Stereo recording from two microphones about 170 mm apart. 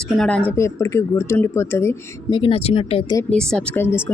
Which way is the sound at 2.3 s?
30° left (ahead or behind).